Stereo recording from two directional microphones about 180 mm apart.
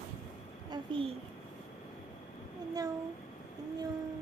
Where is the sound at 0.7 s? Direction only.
30° right (ahead or behind).